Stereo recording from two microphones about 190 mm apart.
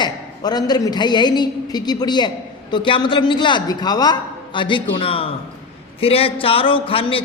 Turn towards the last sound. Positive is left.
turn(degrees=30)  # may be behind; listen again after turning